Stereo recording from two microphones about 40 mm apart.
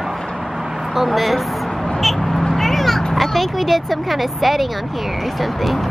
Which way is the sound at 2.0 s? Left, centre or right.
Centre.